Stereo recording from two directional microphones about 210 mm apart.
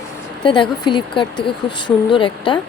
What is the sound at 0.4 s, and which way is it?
Speech, 25° left (ahead or behind).